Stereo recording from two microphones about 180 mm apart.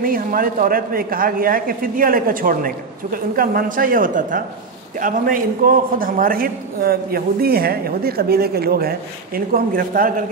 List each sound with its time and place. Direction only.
0.0 s a man's voice: 50° right (ahead or behind)